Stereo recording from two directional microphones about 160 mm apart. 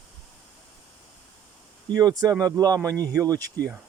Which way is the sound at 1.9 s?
25° right (ahead or behind).